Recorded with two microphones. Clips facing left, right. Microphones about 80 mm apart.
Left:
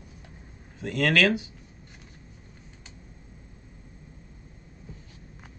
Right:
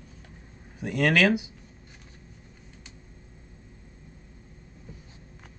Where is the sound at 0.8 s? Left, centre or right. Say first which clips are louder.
Right 1 dB; centre.